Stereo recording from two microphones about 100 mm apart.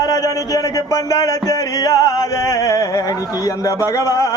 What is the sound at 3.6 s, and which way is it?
Speech, 35° left (ahead or behind).